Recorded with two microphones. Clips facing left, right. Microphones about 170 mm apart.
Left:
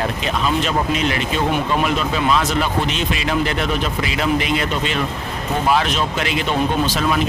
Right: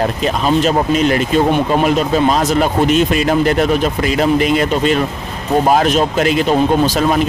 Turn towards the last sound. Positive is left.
turn(degrees=-40)  # may be behind; listen again after turning